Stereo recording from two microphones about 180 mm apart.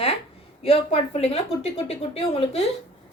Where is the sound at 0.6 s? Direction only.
35° left (ahead or behind).